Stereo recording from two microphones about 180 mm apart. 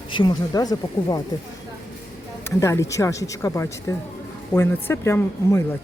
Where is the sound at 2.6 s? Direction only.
15° left (ahead or behind).